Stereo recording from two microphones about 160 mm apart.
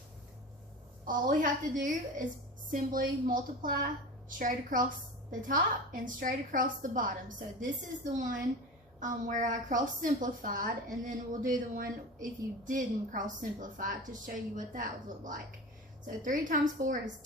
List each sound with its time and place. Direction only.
1.0 s a woman's voice: 55° right (ahead or behind)